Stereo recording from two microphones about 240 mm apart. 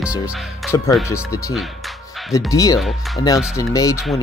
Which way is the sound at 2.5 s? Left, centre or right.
Centre.